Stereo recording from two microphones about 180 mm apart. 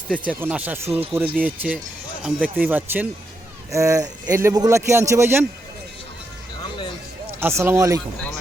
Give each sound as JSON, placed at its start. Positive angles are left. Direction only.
{"t": 0.3, "sound": "a man's voice", "side_deg": -10}
{"t": 7.3, "sound": "a man's voice", "side_deg": -15}